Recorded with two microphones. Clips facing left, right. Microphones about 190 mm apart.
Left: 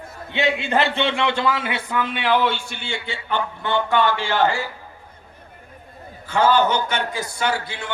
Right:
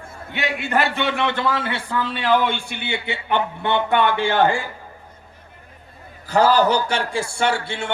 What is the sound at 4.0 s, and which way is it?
Speech, 55° right (ahead or behind).